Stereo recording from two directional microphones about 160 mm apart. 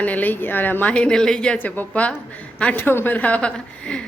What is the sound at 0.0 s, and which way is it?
A woman's voice, 10° left (ahead or behind).